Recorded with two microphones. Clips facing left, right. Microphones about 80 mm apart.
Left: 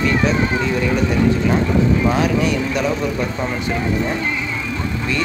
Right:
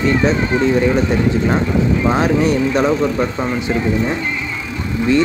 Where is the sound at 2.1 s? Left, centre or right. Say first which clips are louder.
Right 3 dB; right.